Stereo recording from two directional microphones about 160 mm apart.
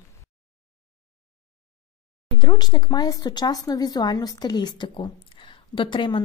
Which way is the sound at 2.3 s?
25° left (ahead or behind).